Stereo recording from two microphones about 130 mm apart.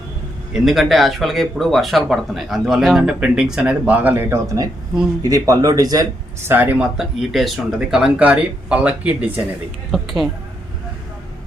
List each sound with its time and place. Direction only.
0.5 s speech: centre (ahead or behind)
5.2 s speech: 25° right (ahead or behind)
6.5 s speech: 15° right (ahead or behind)
9.9 s speech: centre (ahead or behind)